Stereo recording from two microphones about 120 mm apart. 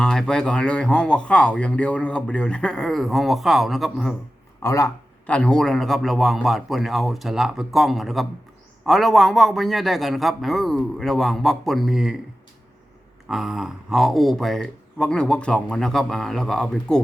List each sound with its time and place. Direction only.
0.0 s speech: 5° left (ahead or behind)
4.6 s speech: 25° left (ahead or behind)
5.2 s speech: 10° left (ahead or behind)
13.2 s speech: centre (ahead or behind)